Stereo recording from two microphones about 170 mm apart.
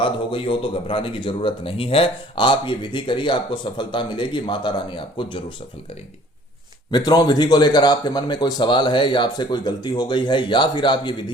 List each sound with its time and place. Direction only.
0.0 s speech: 30° left (ahead or behind)
6.9 s speech: 25° left (ahead or behind)